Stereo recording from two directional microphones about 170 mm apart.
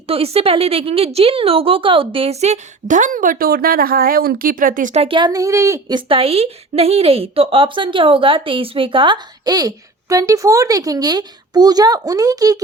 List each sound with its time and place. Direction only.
0.1 s a woman's voice: 35° right (ahead or behind)
5.0 s a woman's voice: 25° right (ahead or behind)
6.0 s a woman's voice: 30° right (ahead or behind)